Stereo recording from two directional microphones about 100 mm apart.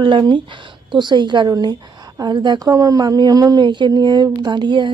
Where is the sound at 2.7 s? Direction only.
35° right (ahead or behind).